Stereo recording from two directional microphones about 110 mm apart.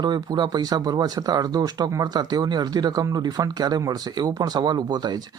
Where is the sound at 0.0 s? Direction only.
40° right (ahead or behind).